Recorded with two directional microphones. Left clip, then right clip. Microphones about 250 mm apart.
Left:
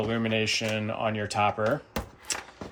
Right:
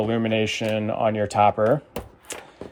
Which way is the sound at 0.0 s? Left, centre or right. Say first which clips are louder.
Right 5 dB; right.